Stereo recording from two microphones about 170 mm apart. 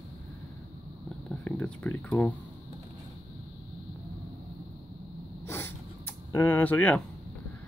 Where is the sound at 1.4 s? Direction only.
10° left (ahead or behind).